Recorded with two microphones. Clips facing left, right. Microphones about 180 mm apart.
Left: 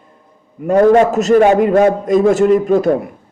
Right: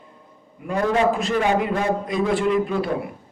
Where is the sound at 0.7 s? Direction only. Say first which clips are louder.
Left 10 dB; 50° left (ahead or behind).